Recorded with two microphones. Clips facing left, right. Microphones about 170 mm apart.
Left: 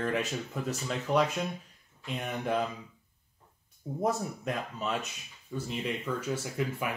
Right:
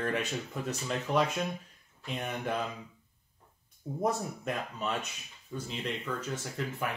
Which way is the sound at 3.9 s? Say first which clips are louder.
Left 1 dB; 5° left (ahead or behind).